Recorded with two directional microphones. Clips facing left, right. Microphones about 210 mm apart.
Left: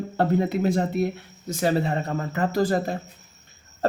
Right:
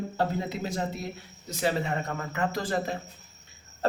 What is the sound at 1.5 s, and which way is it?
Speech, 45° left (ahead or behind).